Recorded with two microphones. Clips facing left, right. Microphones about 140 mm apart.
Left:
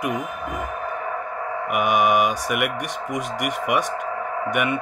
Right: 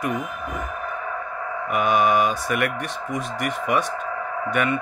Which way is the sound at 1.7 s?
15° left (ahead or behind).